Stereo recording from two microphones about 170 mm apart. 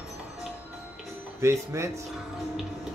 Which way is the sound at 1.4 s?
15° right (ahead or behind).